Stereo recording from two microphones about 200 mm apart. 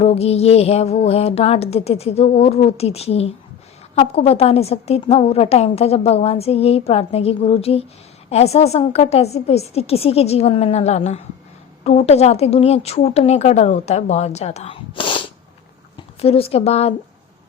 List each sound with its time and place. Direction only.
0.0 s a woman's voice: 30° left (ahead or behind)